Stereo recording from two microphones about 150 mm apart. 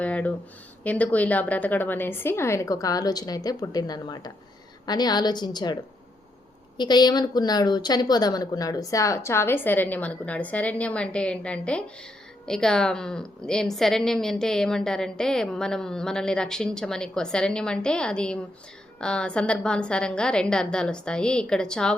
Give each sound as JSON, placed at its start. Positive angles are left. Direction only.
{"t": 0.0, "sound": "a sound", "side_deg": 10}
{"t": 0.9, "sound": "a woman's voice", "side_deg": 10}
{"t": 6.7, "sound": "a woman's voice", "side_deg": 30}